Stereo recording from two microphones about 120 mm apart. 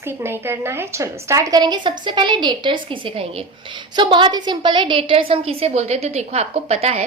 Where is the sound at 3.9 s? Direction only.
40° right (ahead or behind).